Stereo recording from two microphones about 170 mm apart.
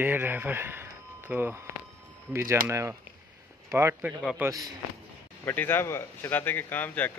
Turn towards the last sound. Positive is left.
turn(degrees=10)  # may be behind; listen again after turning